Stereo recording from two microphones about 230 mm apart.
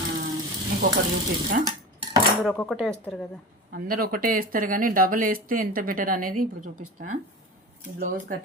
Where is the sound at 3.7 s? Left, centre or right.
Right.